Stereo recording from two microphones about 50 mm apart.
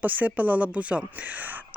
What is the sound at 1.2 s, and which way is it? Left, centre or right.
Speech, right.